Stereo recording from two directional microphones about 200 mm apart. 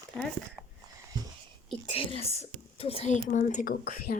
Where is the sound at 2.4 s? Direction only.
30° left (ahead or behind); by 4.1 s 45° left (ahead or behind).